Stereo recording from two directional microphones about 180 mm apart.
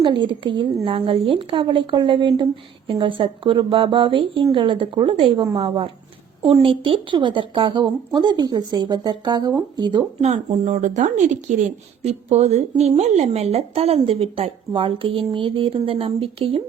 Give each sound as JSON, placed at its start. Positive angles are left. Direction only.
{"t": 0.0, "sound": "speech", "side_deg": -25}
{"t": 10.2, "sound": "a woman's voice", "side_deg": -40}